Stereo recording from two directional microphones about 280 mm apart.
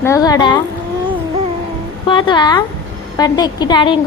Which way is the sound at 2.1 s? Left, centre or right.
Centre.